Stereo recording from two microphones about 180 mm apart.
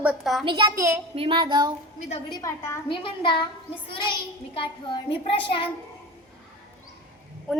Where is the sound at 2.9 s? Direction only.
30° left (ahead or behind).